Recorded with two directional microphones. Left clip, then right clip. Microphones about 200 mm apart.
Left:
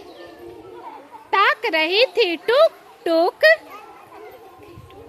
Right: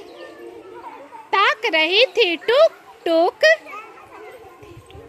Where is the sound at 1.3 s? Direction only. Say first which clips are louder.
Even; centre (ahead or behind).